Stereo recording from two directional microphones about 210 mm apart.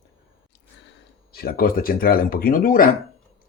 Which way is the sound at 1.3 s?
45° left (ahead or behind).